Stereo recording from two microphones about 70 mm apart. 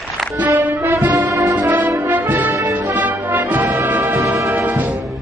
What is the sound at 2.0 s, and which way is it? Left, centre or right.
Brass instrument, right.